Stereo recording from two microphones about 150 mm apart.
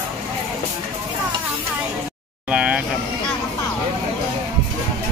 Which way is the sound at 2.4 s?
5° right (ahead or behind).